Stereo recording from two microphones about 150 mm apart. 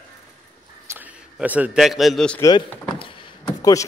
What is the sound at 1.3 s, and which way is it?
Speech, 10° right (ahead or behind).